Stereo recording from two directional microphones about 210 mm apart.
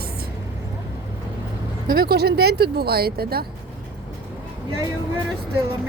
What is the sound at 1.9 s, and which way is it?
Speech, 45° right (ahead or behind).